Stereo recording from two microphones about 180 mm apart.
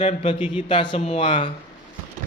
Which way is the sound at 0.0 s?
30° left (ahead or behind).